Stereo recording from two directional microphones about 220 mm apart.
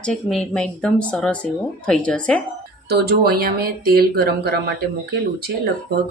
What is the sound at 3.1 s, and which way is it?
Speech, 45° right (ahead or behind).